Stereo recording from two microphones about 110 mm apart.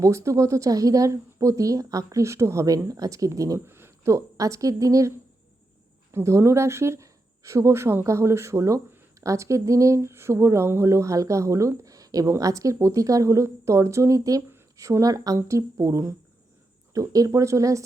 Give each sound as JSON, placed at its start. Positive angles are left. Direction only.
{"t": 0.0, "sound": "speech", "side_deg": -25}